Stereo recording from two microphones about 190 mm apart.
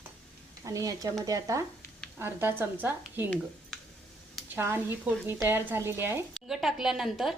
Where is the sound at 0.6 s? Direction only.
15° right (ahead or behind).